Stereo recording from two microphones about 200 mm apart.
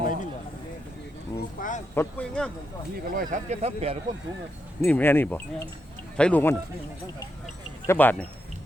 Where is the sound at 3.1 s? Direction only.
40° right (ahead or behind).